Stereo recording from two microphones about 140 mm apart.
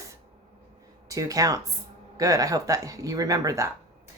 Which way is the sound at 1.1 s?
25° right (ahead or behind).